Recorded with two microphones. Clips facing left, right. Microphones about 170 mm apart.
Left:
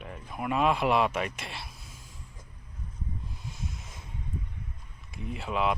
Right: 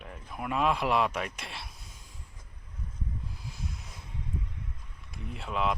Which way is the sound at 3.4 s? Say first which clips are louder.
Left 1 dB; centre (ahead or behind).